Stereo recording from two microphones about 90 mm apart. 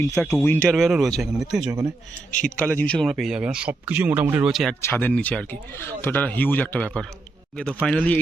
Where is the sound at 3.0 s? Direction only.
Centre (ahead or behind); by 4.2 s 15° right (ahead or behind).